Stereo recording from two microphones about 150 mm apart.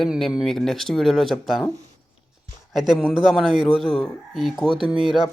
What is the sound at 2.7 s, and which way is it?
Speech, centre (ahead or behind).